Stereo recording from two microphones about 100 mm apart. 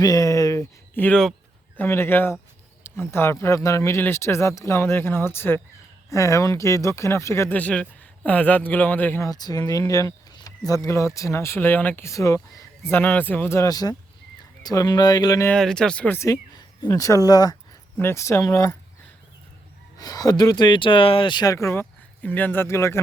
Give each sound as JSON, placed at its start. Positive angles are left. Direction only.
{"t": 0.0, "sound": "speech", "side_deg": 40}
{"t": 1.0, "sound": "speech", "side_deg": 20}
{"t": 7.5, "sound": "a man's voice", "side_deg": 15}
{"t": 9.2, "sound": "speech", "side_deg": 40}
{"t": 12.0, "sound": "speech", "side_deg": 30}
{"t": 13.7, "sound": "speech", "side_deg": 40}
{"t": 15.5, "sound": "a man's voice", "side_deg": 5}
{"t": 16.1, "sound": "speech", "side_deg": 35}
{"t": 17.9, "sound": "speech", "side_deg": 25}
{"t": 20.0, "sound": "speech", "side_deg": 40}
{"t": 21.5, "sound": "speech", "side_deg": 30}
{"t": 22.2, "sound": "speech", "side_deg": 15}